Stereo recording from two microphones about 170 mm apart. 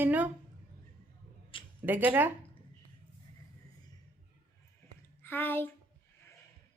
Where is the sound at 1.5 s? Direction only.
30° left (ahead or behind).